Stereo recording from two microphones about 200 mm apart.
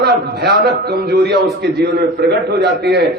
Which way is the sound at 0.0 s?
55° right (ahead or behind).